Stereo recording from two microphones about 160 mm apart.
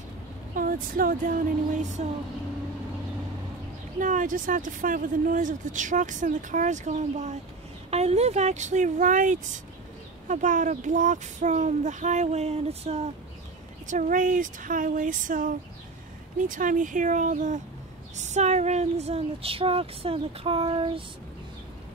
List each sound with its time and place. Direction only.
0.6 s speech: 60° right (ahead or behind)
4.0 s speech: 55° right (ahead or behind); by 13.1 s 40° right (ahead or behind)
13.8 s speech: 55° right (ahead or behind); by 21.0 s 35° right (ahead or behind)